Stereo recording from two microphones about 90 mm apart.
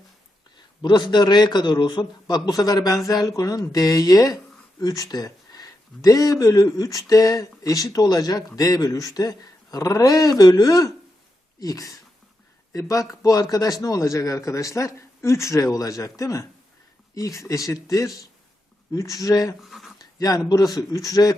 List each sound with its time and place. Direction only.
0.8 s a man's voice: 55° left (ahead or behind); by 19.5 s 40° left (ahead or behind)
19.6 s speech: centre (ahead or behind)
20.0 s a man's voice: 45° left (ahead or behind)